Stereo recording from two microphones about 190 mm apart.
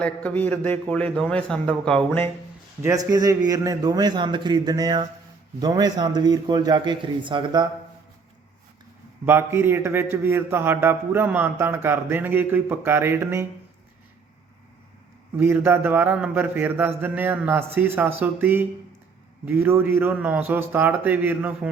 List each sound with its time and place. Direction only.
0.0 s a man's voice: 5° left (ahead or behind)
2.8 s a man's voice: 20° right (ahead or behind)
9.2 s a man's voice: 10° right (ahead or behind)
15.4 s a man's voice: 10° right (ahead or behind)